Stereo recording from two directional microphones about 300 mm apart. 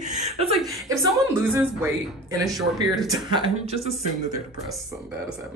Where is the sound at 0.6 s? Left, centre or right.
Centre.